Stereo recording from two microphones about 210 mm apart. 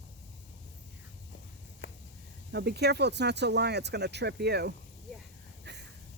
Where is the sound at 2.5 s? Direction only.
50° right (ahead or behind).